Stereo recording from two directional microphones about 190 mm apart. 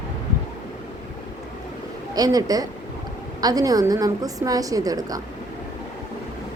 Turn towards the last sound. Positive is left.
turn(degrees=-20)  # may be behind; listen again after turning